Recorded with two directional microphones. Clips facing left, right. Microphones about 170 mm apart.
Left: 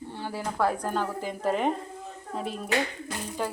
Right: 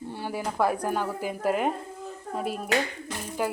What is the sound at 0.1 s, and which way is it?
Speech, 15° right (ahead or behind).